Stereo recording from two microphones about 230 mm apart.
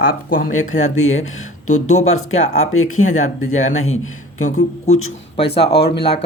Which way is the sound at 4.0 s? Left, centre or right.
Left.